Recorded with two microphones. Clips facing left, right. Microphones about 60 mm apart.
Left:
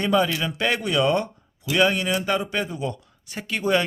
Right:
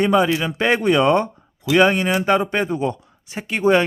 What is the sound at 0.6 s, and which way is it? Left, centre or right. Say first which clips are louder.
Speech: right 6 dB; right.